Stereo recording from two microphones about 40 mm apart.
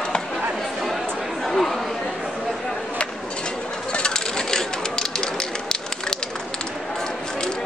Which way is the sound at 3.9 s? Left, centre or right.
Centre.